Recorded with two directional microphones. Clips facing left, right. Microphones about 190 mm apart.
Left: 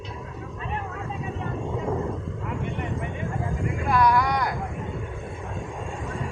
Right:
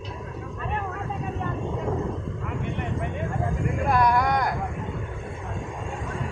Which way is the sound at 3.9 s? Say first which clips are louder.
Left 1 dB; 50° right (ahead or behind).